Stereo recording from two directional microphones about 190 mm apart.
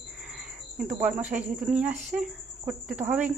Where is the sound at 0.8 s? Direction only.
5° right (ahead or behind).